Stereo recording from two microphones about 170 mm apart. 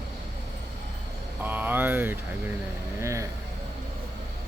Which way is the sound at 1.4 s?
10° right (ahead or behind).